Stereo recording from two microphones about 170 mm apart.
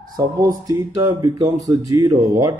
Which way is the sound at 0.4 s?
20° right (ahead or behind).